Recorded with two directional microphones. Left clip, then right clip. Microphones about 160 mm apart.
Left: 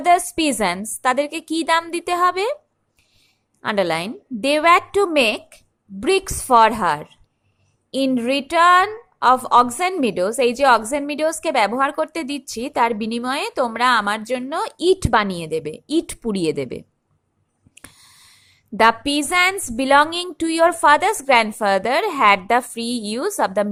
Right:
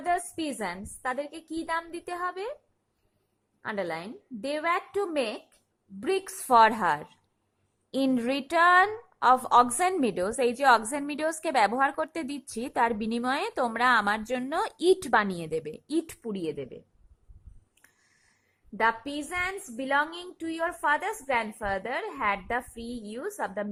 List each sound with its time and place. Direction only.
0.0 s a woman's voice: 15° left (ahead or behind)
3.6 s a woman's voice: 20° left (ahead or behind)
16.2 s a woman's voice: 20° left (ahead or behind)
18.8 s a woman's voice: 20° left (ahead or behind)